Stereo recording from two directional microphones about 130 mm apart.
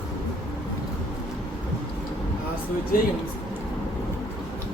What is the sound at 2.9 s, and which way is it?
Speech, 90° left.